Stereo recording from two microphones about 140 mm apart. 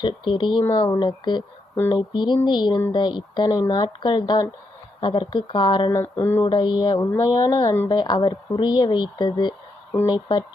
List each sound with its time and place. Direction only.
0.0 s speech: 35° left (ahead or behind)
5.9 s speech: 20° left (ahead or behind)
6.4 s speech: 35° left (ahead or behind)